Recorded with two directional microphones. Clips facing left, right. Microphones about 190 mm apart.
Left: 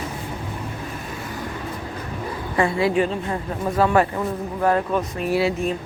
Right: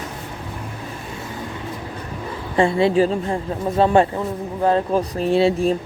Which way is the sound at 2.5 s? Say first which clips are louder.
Right 4 dB; 25° right (ahead or behind).